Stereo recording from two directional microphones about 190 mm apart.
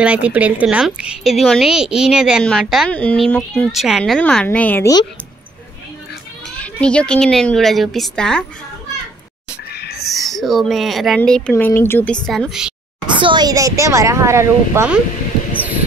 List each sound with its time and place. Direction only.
0.0 s a woman's voice: 5° right (ahead or behind); by 5.0 s 15° left (ahead or behind)
6.5 s a woman's voice: 5° left (ahead or behind)
9.8 s a sound: 60° left (ahead or behind)
10.0 s a woman's voice: centre (ahead or behind)
13.2 s speech: 25° right (ahead or behind)